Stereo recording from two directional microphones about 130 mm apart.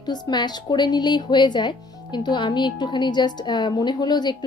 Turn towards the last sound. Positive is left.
turn(degrees=35)  # may be behind; listen again after turning